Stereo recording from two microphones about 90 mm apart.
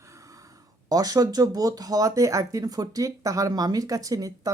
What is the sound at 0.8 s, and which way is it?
Speech, 45° right (ahead or behind).